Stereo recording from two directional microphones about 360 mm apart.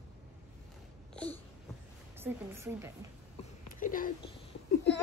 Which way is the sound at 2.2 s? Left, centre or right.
Centre.